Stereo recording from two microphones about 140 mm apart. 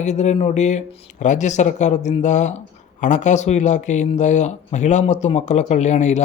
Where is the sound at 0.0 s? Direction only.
55° left (ahead or behind).